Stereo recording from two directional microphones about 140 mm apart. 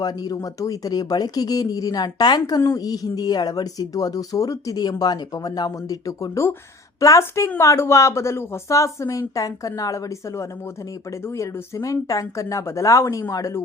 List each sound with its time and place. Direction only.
0.0 s a woman's voice: 25° left (ahead or behind)